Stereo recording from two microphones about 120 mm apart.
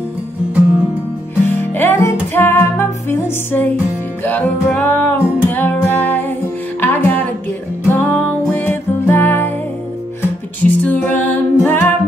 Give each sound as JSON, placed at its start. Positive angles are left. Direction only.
{"t": 1.5, "sound": "music", "side_deg": 15}
{"t": 10.6, "sound": "music", "side_deg": 15}